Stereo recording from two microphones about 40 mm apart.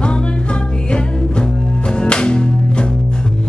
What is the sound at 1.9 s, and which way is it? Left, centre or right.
Music, left.